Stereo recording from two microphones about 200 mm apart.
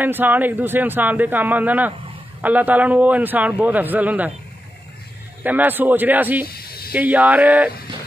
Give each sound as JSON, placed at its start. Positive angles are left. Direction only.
{"t": 0.0, "sound": "speech", "side_deg": -10}
{"t": 5.4, "sound": "speech", "side_deg": -10}
{"t": 6.4, "sound": "snake", "side_deg": 50}
{"t": 6.9, "sound": "speech", "side_deg": -10}